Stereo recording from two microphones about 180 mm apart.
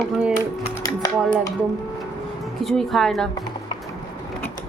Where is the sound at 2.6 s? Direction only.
Centre (ahead or behind).